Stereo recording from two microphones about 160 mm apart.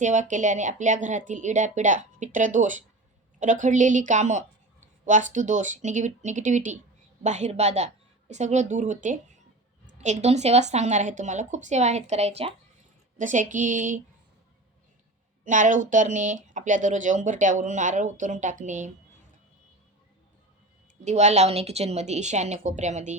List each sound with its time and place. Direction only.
0.0 s speech: 50° right (ahead or behind)
13.1 s speech: 50° right (ahead or behind)
15.4 s speech: 55° right (ahead or behind)
21.0 s speech: 45° right (ahead or behind)